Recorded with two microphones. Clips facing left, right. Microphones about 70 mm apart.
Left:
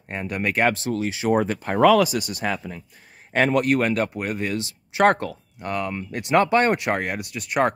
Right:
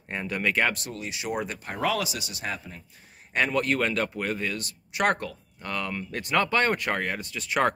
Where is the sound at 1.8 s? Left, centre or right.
Left.